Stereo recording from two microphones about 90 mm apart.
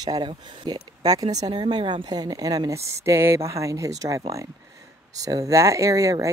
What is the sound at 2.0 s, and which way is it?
Speech, 45° right (ahead or behind).